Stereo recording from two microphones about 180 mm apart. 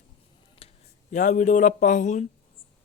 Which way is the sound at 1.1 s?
45° left (ahead or behind).